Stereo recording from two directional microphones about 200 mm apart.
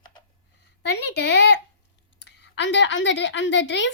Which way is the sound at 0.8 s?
60° left (ahead or behind).